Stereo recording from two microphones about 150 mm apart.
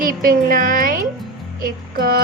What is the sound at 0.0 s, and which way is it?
Speech, 70° right (ahead or behind).